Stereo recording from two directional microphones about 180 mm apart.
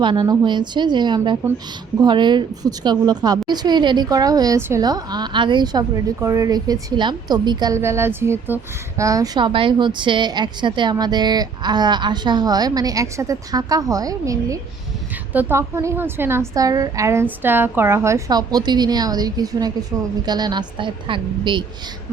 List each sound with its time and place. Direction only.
0.0 s a woman's voice: 25° right (ahead or behind)